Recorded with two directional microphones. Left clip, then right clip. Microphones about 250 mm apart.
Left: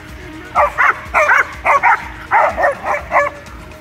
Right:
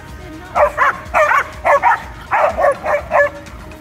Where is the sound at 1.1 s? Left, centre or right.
Right.